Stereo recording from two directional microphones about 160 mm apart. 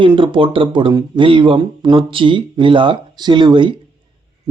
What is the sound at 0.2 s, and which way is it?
Speech, 30° right (ahead or behind).